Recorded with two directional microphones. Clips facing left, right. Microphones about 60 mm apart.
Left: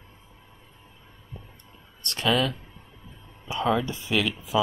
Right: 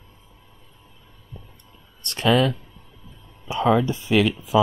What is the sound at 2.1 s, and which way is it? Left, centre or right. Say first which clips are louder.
Speech: right 5 dB; right.